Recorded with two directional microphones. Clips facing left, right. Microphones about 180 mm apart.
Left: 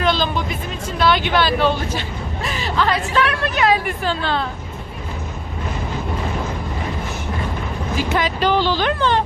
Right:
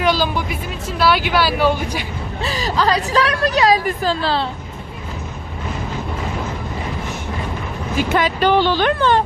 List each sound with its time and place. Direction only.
0.0 s speech: 10° right (ahead or behind)
2.4 s a woman's voice: 35° right (ahead or behind)
8.1 s speech: 55° right (ahead or behind)